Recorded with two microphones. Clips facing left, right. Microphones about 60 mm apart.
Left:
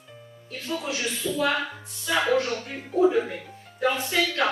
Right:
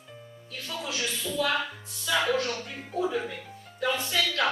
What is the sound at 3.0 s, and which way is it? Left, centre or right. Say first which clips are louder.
Speech: left 8 dB; left.